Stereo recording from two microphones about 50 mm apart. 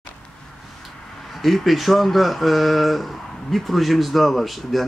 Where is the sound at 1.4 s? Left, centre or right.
Centre.